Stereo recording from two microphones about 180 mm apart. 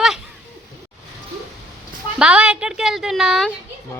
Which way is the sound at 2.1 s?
5° right (ahead or behind).